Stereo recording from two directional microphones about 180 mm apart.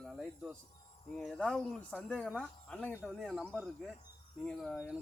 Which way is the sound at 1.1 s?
5° left (ahead or behind).